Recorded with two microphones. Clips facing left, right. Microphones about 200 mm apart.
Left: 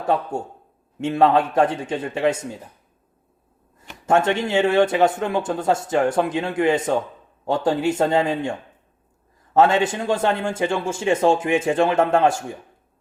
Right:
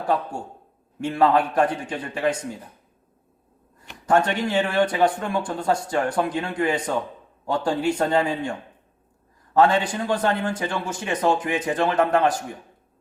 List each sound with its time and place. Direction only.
0.0 s speech: 25° left (ahead or behind)
4.0 s speech: 25° left (ahead or behind)
9.6 s speech: 25° left (ahead or behind)